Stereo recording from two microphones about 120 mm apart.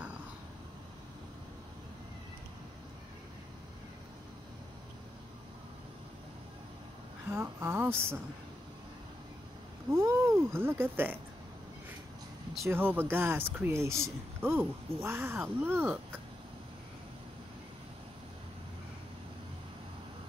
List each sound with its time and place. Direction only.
7.2 s speech: 20° right (ahead or behind)
9.8 s speech: 20° right (ahead or behind)
12.6 s speech: 15° right (ahead or behind)